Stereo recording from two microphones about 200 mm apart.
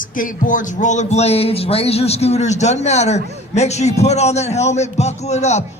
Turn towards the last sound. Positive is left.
turn(degrees=35)  # may be behind; listen again after turning